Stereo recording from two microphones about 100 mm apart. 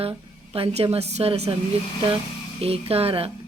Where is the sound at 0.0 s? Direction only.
70° right (ahead or behind).